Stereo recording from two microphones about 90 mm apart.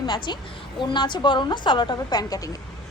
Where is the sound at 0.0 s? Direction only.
55° left (ahead or behind).